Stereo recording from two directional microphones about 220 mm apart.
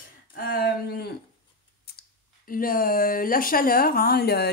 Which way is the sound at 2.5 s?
40° left (ahead or behind).